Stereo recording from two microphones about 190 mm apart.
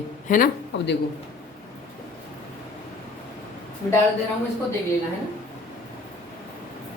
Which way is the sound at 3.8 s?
15° left (ahead or behind).